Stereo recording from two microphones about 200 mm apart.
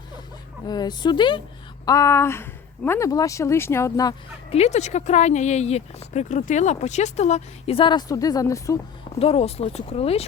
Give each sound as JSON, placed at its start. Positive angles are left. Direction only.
{"t": 0.7, "sound": "speech", "side_deg": 20}
{"t": 4.5, "sound": "speech", "side_deg": 35}
{"t": 9.1, "sound": "speech", "side_deg": 30}